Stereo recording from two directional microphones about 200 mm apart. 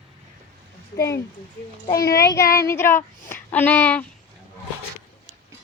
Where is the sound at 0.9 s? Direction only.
15° left (ahead or behind).